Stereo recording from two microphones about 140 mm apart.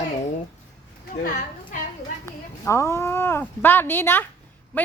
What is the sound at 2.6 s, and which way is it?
A woman's voice, 20° left (ahead or behind).